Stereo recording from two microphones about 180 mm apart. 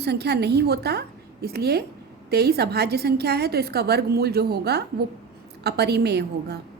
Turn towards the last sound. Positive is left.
turn(degrees=-65)  # may be behind; listen again after turning